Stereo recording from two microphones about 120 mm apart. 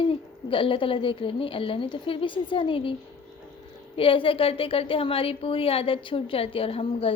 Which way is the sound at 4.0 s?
50° left (ahead or behind).